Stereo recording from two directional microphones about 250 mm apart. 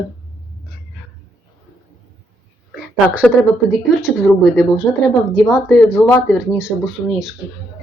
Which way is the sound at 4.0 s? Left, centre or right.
Centre.